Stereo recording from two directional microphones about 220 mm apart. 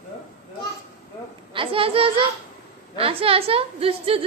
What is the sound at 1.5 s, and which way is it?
A woman's voice, 25° right (ahead or behind).